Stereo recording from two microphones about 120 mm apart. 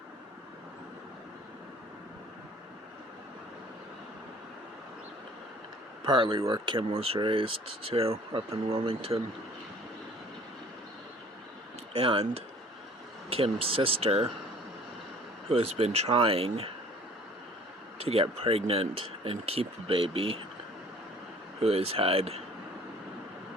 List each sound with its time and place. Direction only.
6.1 s speech: 40° right (ahead or behind)
11.9 s speech: 50° right (ahead or behind)
15.4 s speech: 55° right (ahead or behind)
18.0 s speech: 55° right (ahead or behind)
21.6 s speech: 55° right (ahead or behind)